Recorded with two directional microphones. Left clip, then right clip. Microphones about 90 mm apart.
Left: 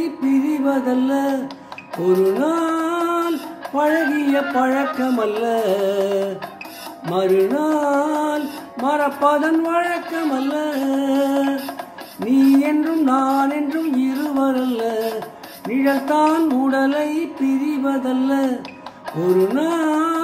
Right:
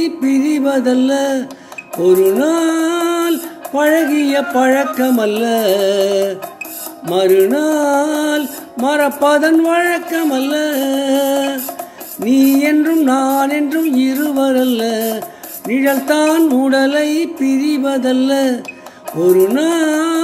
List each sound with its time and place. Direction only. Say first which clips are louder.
0.0 s music: right 5 dB; 15° right (ahead or behind)